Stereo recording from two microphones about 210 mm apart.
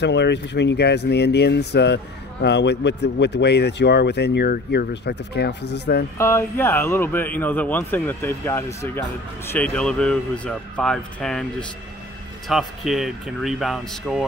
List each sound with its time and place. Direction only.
0.0 s speech: 55° left (ahead or behind)
6.1 s speech: 10° left (ahead or behind)
12.4 s speech: centre (ahead or behind)